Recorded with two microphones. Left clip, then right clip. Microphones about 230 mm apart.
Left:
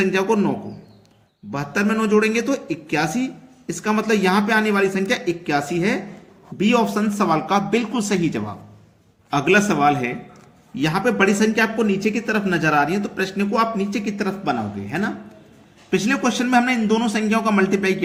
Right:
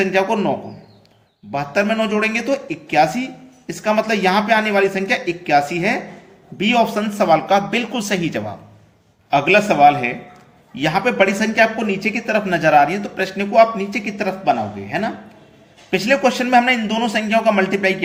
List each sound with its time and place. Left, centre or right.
0.0 s speech: left
1.5 s speech: left